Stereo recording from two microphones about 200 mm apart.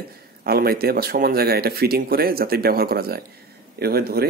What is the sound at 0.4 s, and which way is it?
Speech, 50° right (ahead or behind).